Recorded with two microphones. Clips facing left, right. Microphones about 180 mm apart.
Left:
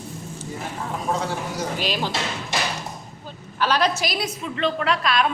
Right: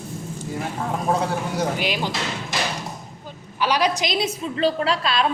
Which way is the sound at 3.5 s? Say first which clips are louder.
Even; 10° right (ahead or behind).